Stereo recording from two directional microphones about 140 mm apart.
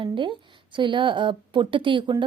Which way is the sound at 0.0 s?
35° right (ahead or behind).